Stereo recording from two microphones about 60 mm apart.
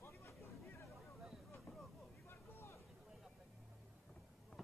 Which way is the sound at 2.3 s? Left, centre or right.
Left.